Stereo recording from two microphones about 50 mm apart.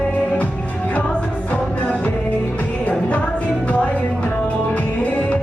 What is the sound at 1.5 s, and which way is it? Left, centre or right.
Music, left.